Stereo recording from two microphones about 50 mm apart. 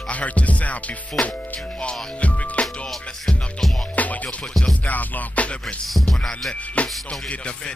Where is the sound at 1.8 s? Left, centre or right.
Left.